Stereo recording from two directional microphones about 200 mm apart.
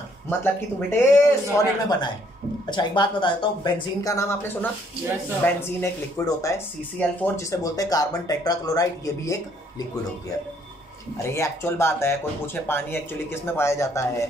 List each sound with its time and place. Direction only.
0.3 s a woman's voice: 10° left (ahead or behind)
11.2 s speech: 15° left (ahead or behind)